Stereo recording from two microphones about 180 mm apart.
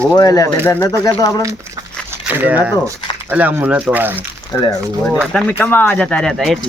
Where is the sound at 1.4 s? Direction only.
20° right (ahead or behind).